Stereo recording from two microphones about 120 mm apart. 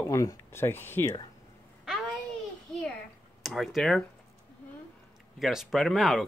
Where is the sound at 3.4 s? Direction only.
Centre (ahead or behind).